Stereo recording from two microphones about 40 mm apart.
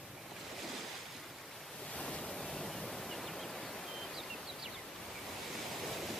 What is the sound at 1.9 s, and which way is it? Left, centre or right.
Waves, left.